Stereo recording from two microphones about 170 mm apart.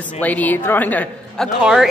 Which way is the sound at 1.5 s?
5° right (ahead or behind).